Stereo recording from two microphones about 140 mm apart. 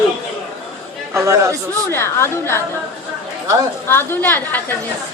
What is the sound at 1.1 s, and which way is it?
Speech, 20° right (ahead or behind).